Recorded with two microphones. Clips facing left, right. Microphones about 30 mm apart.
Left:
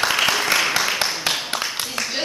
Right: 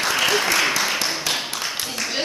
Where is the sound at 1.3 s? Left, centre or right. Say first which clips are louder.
Left 2 dB; centre.